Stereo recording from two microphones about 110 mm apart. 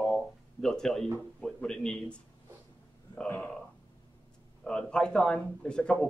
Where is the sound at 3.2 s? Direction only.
10° left (ahead or behind).